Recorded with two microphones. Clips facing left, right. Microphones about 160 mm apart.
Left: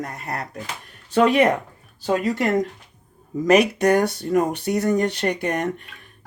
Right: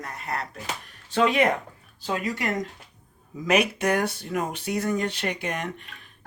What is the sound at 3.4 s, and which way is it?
Speech, 40° left (ahead or behind).